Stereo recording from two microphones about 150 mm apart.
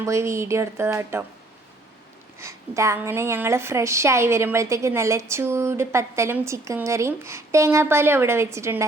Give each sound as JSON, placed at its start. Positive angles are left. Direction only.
{"t": 0.0, "sound": "speech", "side_deg": -20}
{"t": 2.4, "sound": "a woman's voice", "side_deg": -20}